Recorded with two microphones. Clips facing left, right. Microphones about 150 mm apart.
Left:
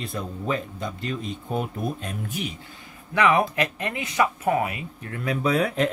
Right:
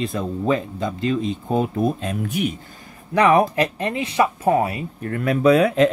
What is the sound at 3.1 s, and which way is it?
Speech, 35° right (ahead or behind).